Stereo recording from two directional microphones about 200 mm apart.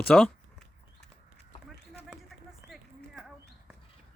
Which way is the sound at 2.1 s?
Centre (ahead or behind).